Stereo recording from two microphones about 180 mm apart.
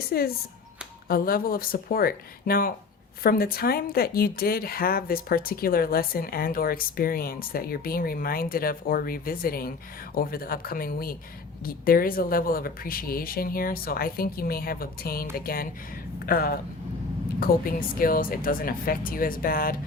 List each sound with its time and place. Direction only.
0.1 s a woman's voice: 55° left (ahead or behind)